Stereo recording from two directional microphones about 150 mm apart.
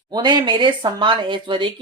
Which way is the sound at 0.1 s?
30° right (ahead or behind).